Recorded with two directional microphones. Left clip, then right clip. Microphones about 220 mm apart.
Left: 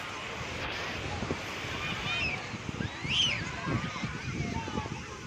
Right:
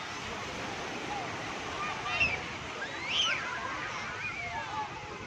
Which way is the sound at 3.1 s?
40° right (ahead or behind).